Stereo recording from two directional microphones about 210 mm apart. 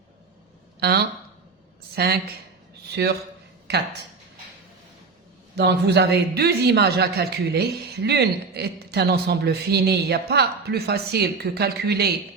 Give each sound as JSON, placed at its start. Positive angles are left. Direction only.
{"t": 0.8, "sound": "speech", "side_deg": -50}
{"t": 5.5, "sound": "speech", "side_deg": -55}